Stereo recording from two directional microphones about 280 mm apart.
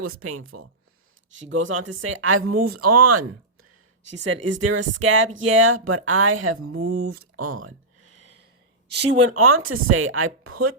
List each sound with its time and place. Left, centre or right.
0.0 s speech: right
4.1 s speech: right
8.9 s a woman's voice: right
9.3 s speech: right